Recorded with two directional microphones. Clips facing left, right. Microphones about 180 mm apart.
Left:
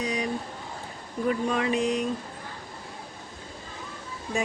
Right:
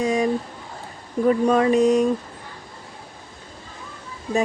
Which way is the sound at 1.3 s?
40° right (ahead or behind).